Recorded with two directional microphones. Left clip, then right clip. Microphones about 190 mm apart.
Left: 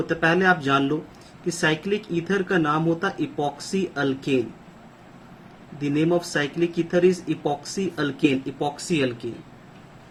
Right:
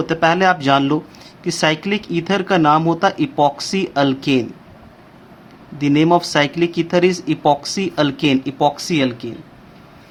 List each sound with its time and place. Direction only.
0.0 s speech: 55° right (ahead or behind)
5.8 s speech: 50° right (ahead or behind)